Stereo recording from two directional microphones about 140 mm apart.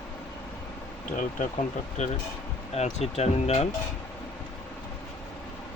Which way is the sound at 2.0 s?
55° left (ahead or behind).